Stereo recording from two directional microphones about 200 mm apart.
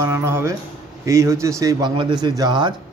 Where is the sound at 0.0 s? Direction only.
15° right (ahead or behind).